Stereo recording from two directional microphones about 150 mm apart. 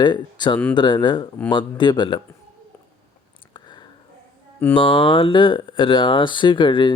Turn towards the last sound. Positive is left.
turn(degrees=30)  # may be behind; listen again after turning